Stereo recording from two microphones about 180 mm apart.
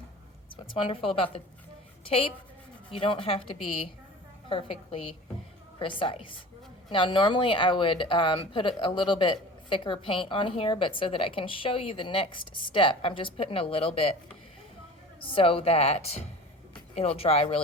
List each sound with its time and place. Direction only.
0.5 s a woman's voice: 30° left (ahead or behind)
15.2 s a woman's voice: 30° left (ahead or behind)